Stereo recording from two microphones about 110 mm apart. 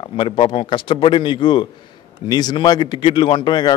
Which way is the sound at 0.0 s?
50° left (ahead or behind).